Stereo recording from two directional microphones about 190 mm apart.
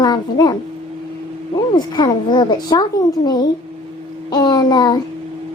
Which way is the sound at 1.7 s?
20° left (ahead or behind).